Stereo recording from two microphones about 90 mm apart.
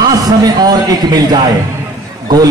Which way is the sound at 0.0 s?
45° right (ahead or behind).